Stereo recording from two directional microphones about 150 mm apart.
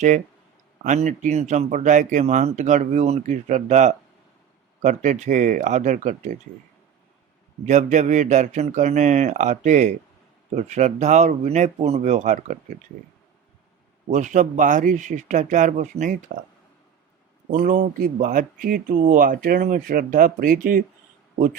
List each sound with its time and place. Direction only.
0.9 s speech: 55° right (ahead or behind)
7.6 s speech: 55° right (ahead or behind)
14.1 s speech: 55° right (ahead or behind)
17.5 s speech: 65° right (ahead or behind)